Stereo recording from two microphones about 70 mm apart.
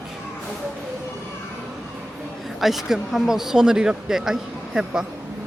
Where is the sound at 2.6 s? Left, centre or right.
Centre.